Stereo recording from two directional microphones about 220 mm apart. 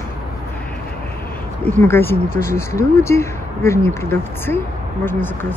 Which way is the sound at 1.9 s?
10° left (ahead or behind).